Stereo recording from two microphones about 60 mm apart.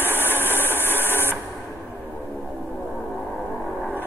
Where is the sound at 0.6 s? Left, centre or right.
Left.